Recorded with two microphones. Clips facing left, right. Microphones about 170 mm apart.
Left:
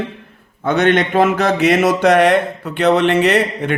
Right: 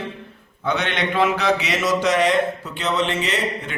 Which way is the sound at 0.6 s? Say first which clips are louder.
Left 9 dB; 50° left (ahead or behind).